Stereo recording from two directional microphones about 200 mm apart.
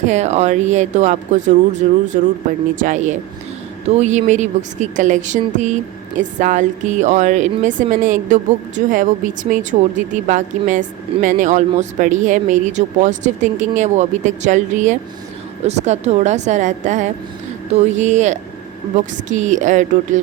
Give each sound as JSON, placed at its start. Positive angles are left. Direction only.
{"t": 0.1, "sound": "speech", "side_deg": -35}
{"t": 2.8, "sound": "speech", "side_deg": -35}